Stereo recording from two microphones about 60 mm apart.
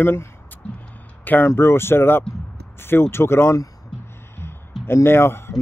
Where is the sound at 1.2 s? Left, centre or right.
Left.